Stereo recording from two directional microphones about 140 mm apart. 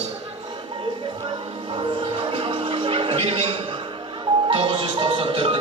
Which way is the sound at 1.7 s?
40° right (ahead or behind).